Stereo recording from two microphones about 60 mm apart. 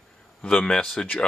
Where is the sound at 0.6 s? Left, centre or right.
Centre.